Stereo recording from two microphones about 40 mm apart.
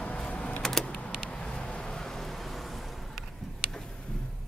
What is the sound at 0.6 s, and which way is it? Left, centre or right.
Power windows, centre.